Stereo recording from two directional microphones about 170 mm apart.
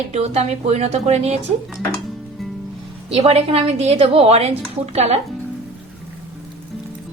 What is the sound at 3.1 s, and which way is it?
Speech, 35° right (ahead or behind).